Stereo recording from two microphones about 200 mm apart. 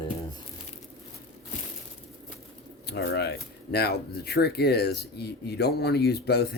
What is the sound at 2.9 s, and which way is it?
Speech, 55° left (ahead or behind).